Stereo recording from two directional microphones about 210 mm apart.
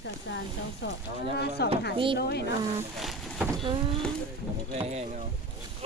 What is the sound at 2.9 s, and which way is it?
Boat, centre (ahead or behind).